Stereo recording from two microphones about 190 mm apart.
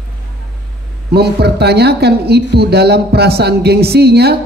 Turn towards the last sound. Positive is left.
turn(degrees=-60)  # may be behind; listen again after turning